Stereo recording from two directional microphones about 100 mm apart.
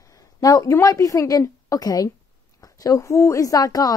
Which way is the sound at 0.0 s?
35° left (ahead or behind).